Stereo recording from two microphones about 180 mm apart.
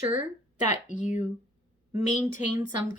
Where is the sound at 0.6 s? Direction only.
45° left (ahead or behind).